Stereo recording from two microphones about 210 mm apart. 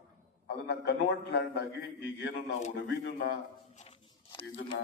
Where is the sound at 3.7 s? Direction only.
25° left (ahead or behind).